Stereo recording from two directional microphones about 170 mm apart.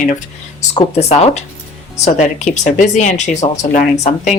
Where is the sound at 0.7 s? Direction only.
40° left (ahead or behind).